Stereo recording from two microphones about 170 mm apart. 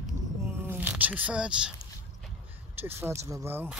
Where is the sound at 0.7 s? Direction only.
10° right (ahead or behind).